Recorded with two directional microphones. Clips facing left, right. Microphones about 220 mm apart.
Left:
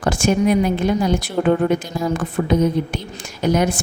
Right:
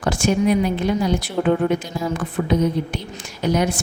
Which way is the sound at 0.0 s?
45° left (ahead or behind).